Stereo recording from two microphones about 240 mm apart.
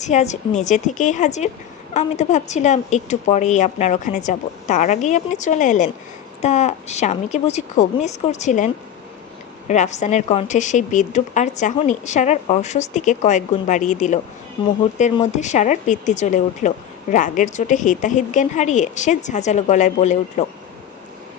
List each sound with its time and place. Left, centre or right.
0.0 s a woman's voice: left